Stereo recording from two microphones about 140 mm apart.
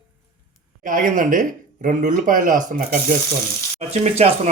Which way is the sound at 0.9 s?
70° right (ahead or behind).